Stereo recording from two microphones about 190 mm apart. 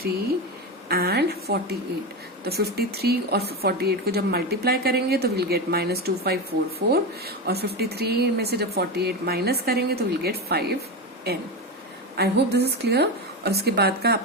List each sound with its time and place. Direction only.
0.9 s a woman's voice: 55° right (ahead or behind)
12.1 s a woman's voice: 60° right (ahead or behind)